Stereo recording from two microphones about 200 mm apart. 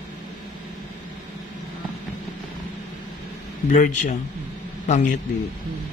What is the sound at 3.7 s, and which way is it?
A man's voice, 35° left (ahead or behind).